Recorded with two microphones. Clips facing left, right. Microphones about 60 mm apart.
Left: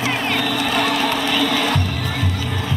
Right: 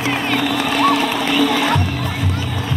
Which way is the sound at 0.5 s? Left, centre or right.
Right.